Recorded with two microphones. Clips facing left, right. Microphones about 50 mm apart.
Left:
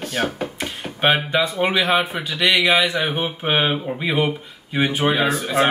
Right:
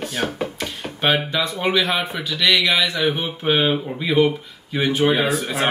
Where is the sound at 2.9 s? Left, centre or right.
Left.